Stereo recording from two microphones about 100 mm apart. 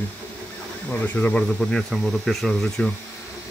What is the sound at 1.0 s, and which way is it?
Speech, 15° left (ahead or behind).